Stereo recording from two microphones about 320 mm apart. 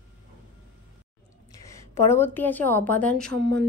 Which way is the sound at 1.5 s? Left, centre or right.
Centre.